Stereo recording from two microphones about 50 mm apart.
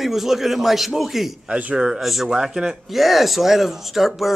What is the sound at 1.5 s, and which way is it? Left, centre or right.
Speech, right.